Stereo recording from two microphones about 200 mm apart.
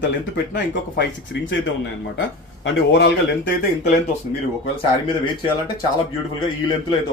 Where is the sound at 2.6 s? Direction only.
65° left (ahead or behind).